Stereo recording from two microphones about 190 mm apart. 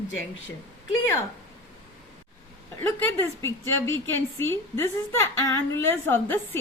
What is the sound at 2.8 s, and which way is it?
A woman's voice, 10° left (ahead or behind).